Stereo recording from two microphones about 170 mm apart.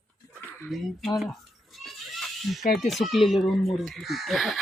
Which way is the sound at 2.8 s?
Centre (ahead or behind).